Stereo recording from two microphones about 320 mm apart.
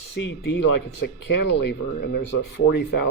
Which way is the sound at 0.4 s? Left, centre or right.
Left.